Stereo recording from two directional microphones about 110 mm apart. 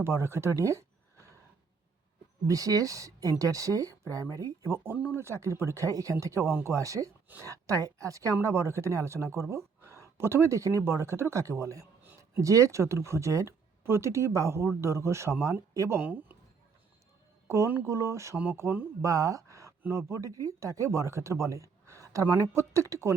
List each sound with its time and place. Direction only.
0.0 s speech: 25° right (ahead or behind)
2.5 s speech: 30° right (ahead or behind)
4.9 s speech: 10° right (ahead or behind)
5.2 s speech: 25° right (ahead or behind)
17.5 s speech: 20° right (ahead or behind)